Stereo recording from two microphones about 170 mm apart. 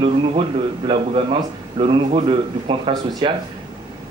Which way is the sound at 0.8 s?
30° right (ahead or behind).